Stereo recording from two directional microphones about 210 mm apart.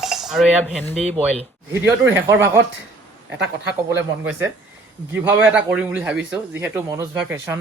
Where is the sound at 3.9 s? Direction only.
10° right (ahead or behind).